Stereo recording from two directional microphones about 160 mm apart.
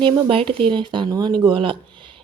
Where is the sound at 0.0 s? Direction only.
30° right (ahead or behind).